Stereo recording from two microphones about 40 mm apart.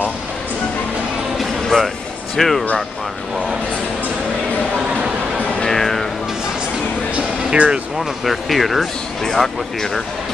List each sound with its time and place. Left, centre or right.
1.4 s music: centre
2.3 s speech: centre
5.7 s music: centre
7.2 s music: right
8.0 s speech: centre
9.2 s speech: centre